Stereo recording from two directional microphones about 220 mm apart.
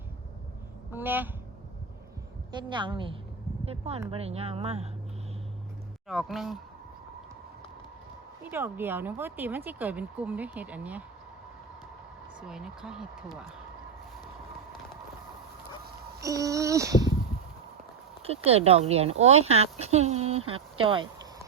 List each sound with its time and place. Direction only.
0.9 s speech: 10° right (ahead or behind)
2.5 s speech: 20° right (ahead or behind)
6.1 s speech: centre (ahead or behind)
8.4 s speech: 10° right (ahead or behind)
12.4 s speech: 5° right (ahead or behind)
16.2 s speech: 15° right (ahead or behind)
18.3 s speech: 25° right (ahead or behind)
20.5 s a sound: 25° right (ahead or behind)